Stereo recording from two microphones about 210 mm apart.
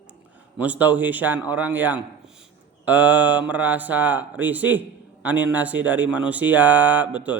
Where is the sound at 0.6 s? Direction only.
5° right (ahead or behind).